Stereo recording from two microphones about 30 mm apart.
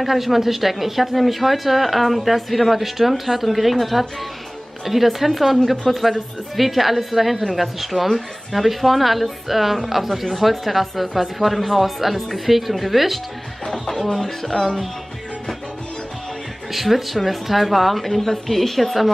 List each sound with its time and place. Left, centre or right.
0.0 s speech: centre
13.7 s speech: centre
14.5 s speech: left
16.7 s speech: centre